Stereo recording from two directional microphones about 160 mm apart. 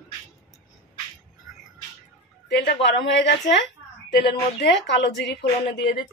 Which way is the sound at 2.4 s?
90° left.